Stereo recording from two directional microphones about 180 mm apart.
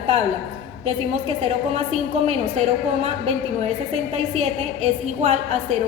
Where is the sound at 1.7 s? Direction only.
35° right (ahead or behind).